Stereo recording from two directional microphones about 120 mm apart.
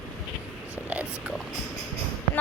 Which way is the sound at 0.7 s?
15° right (ahead or behind).